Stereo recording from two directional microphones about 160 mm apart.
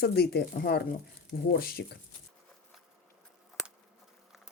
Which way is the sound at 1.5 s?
70° left (ahead or behind).